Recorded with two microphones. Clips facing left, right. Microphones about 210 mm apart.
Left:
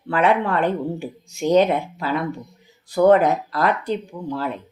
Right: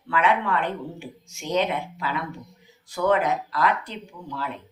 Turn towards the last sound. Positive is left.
turn(degrees=35)  # may be behind; listen again after turning